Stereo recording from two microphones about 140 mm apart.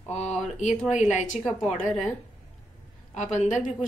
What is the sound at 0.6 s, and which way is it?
Speech, 55° left (ahead or behind).